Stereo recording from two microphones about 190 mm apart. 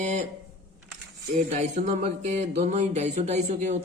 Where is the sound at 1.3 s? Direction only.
40° right (ahead or behind).